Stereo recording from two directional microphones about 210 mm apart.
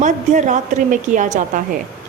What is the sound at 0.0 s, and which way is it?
A woman's voice, 35° right (ahead or behind).